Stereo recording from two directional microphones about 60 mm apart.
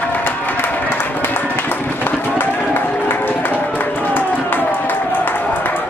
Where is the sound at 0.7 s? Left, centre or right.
Left.